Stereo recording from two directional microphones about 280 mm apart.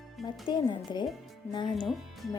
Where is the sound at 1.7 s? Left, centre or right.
Centre.